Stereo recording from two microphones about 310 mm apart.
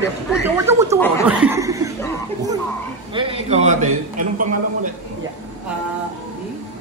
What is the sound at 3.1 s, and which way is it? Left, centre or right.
Speech, centre.